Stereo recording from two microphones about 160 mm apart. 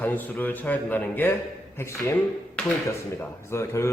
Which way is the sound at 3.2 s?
15° left (ahead or behind).